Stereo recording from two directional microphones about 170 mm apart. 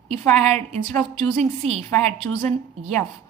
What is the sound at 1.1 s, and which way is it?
Speech, 40° right (ahead or behind).